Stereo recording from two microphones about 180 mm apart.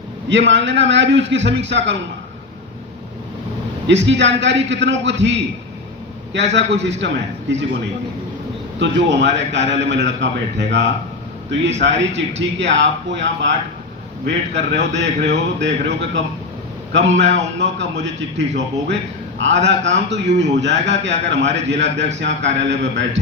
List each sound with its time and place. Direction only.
0.3 s a man's voice: 80° right
3.8 s a man's voice: 80° right
8.8 s a man's voice: 80° right